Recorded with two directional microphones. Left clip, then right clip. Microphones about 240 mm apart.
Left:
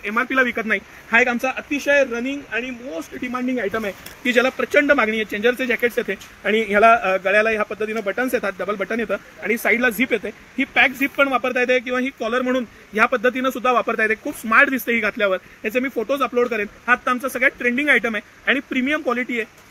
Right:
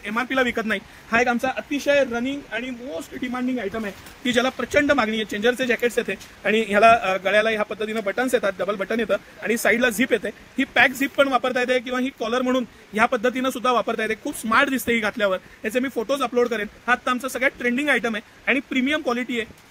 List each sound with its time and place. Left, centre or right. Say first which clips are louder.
0.0 s speech: left 3 dB; right
3.1 s speech: left 1 dB; centre
4.2 s speech: left 4 dB; right